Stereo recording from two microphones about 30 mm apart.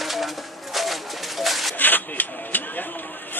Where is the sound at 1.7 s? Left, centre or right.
Left.